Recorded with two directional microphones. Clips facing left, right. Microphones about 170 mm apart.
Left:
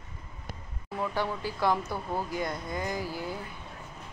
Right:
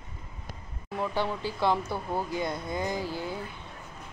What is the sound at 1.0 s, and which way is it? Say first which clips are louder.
Speech: right 1 dB; 25° right (ahead or behind).